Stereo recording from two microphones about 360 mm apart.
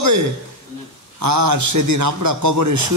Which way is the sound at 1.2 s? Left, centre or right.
Right.